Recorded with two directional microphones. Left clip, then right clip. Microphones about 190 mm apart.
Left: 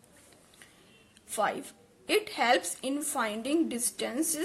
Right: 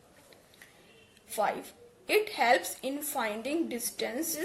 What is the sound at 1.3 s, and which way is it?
A woman's voice, 35° left (ahead or behind).